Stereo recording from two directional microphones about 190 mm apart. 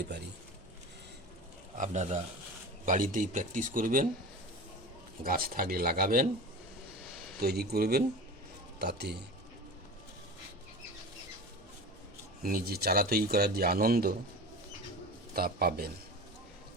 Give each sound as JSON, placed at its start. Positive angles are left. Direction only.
{"t": 1.8, "sound": "speech", "side_deg": -40}
{"t": 5.2, "sound": "speech", "side_deg": -50}
{"t": 7.3, "sound": "speech", "side_deg": -55}
{"t": 12.4, "sound": "speech", "side_deg": -50}
{"t": 15.3, "sound": "speech", "side_deg": -50}